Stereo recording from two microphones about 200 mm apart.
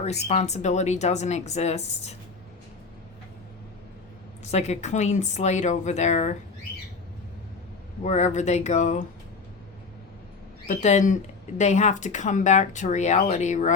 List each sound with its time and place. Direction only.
0.3 s speech: 35° left (ahead or behind)
4.5 s speech: 35° left (ahead or behind)
8.0 s speech: 35° left (ahead or behind)
10.7 s speech: 35° left (ahead or behind)